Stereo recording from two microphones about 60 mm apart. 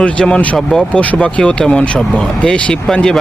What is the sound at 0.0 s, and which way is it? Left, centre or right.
Speech, left.